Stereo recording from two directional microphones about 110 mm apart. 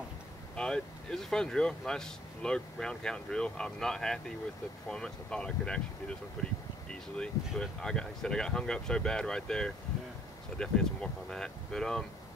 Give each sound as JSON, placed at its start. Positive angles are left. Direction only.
{"t": 0.6, "sound": "speech", "side_deg": 5}